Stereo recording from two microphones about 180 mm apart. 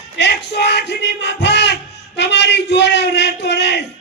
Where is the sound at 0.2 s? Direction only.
70° left (ahead or behind).